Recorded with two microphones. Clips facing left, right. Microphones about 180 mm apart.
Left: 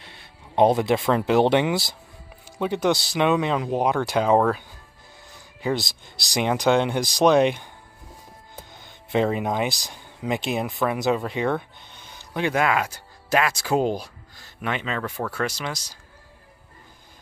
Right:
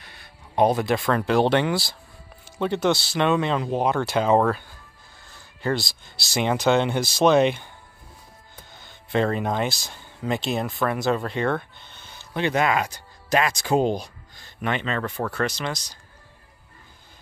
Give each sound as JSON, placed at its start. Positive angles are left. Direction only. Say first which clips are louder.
{"t": 0.0, "sound": "speech", "louder": "left 1 dB", "side_deg": 25}
{"t": 8.8, "sound": "speech", "louder": "left 1 dB", "side_deg": 10}
{"t": 10.8, "sound": "speech", "louder": "left 1 dB", "side_deg": 0}